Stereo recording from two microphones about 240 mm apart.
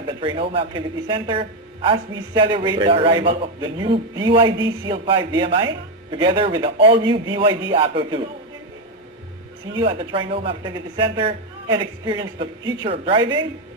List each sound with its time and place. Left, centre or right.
0.2 s speech: right
9.7 s speech: right